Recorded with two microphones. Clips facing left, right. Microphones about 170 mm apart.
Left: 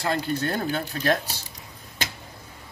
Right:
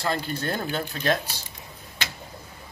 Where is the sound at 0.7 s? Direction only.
35° left (ahead or behind).